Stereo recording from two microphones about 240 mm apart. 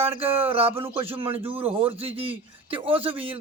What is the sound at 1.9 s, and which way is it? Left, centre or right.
Speech, right.